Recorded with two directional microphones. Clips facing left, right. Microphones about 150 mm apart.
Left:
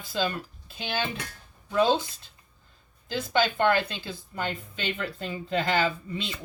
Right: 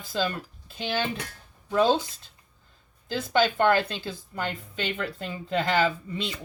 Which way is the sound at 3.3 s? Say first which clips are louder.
Right 2 dB; 45° right (ahead or behind).